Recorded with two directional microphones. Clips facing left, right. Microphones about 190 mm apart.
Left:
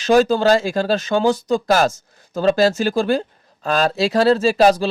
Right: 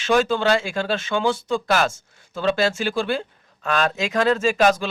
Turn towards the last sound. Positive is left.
turn(degrees=35)  # may be behind; listen again after turning